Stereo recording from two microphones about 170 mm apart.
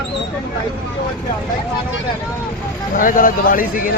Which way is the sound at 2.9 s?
55° left (ahead or behind).